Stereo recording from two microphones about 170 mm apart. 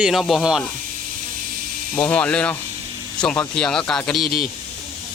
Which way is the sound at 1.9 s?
5° left (ahead or behind).